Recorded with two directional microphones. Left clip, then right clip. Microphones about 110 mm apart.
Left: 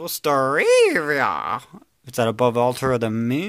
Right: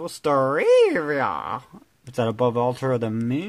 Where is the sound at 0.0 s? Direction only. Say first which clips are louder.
Left 1 dB; 10° left (ahead or behind).